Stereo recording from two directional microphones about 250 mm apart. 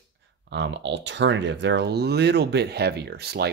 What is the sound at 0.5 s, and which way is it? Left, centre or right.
Speech, right.